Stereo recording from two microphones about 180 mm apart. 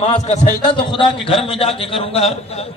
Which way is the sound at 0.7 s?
30° left (ahead or behind).